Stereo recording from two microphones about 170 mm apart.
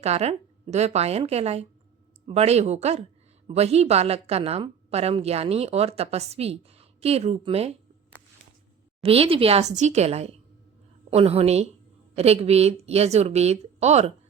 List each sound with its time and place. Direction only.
0.0 s a woman's voice: 40° right (ahead or behind)
9.0 s a woman's voice: 35° right (ahead or behind)